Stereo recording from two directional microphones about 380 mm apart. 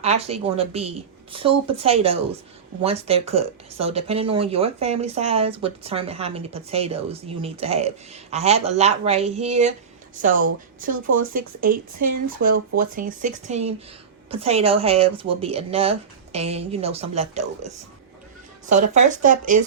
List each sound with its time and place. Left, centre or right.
0.0 s speech: centre
18.9 s speech: centre